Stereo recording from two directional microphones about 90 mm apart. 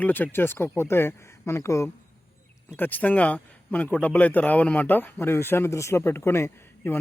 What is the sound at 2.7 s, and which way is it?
Speech, 20° left (ahead or behind).